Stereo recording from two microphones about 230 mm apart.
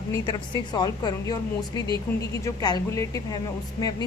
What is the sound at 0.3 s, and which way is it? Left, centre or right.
A woman's voice, centre.